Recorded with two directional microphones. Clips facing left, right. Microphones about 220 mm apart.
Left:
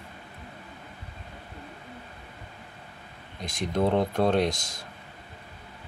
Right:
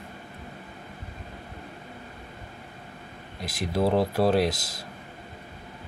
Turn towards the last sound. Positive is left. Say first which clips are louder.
# right 1 dB
turn(degrees=-5)  # may be behind; listen again after turning